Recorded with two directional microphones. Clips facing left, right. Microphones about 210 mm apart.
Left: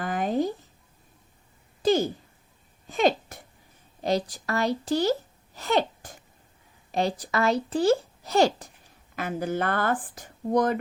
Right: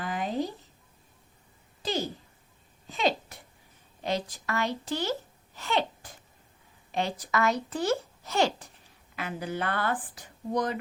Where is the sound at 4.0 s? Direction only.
40° left (ahead or behind).